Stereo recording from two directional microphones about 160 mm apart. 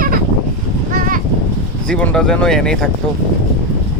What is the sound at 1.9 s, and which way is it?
Speech, 5° left (ahead or behind).